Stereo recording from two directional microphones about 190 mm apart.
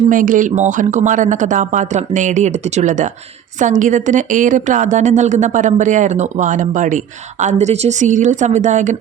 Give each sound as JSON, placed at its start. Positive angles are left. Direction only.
{"t": 0.1, "sound": "a woman's voice", "side_deg": -45}